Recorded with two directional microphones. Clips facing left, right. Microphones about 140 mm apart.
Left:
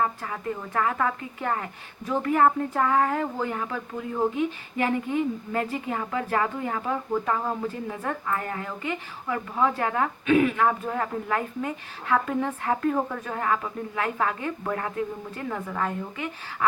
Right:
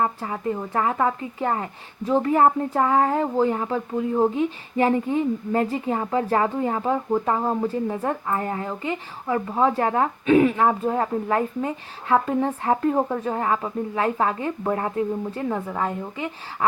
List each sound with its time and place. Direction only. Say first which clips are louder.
0.0 s a woman's voice: right 3 dB; 30° right (ahead or behind)